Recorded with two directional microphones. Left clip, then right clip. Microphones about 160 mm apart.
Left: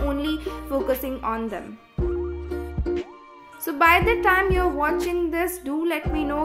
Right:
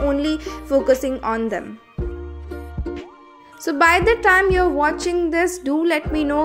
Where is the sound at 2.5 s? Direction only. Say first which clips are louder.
Left 1 dB; centre (ahead or behind).